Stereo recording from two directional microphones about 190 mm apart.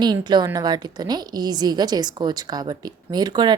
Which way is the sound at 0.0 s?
25° right (ahead or behind).